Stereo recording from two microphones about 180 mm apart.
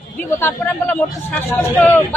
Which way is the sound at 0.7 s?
10° left (ahead or behind).